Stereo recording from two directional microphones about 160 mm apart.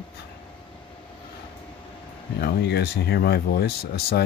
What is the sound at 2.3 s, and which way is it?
Speech, 90° left.